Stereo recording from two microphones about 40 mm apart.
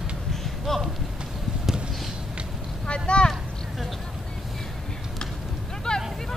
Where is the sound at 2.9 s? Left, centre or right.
Left.